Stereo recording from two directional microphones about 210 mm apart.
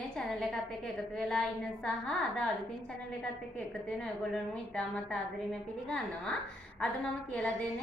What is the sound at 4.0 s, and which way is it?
A woman's voice, 5° left (ahead or behind).